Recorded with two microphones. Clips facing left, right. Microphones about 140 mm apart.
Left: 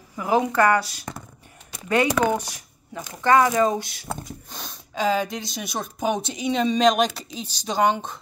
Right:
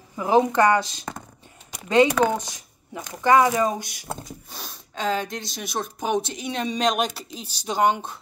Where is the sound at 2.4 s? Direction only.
20° right (ahead or behind).